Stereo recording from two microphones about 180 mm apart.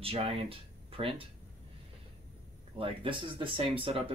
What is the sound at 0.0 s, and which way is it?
Speech, 30° right (ahead or behind).